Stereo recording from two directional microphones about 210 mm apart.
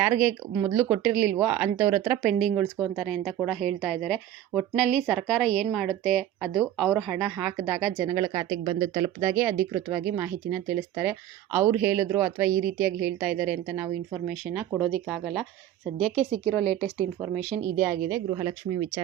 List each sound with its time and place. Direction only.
0.0 s speech: 5° right (ahead or behind); by 9.1 s 25° right (ahead or behind)
9.2 s speech: 10° right (ahead or behind); by 16.9 s 5° left (ahead or behind)
17.3 s speech: 5° right (ahead or behind)